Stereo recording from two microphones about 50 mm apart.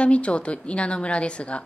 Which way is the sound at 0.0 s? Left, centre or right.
Left.